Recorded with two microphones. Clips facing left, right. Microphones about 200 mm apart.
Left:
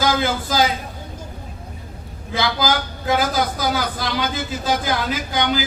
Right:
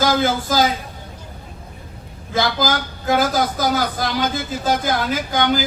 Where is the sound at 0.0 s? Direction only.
45° right (ahead or behind).